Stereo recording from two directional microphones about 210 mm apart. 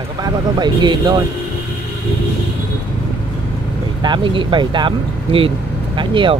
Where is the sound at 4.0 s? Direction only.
20° right (ahead or behind).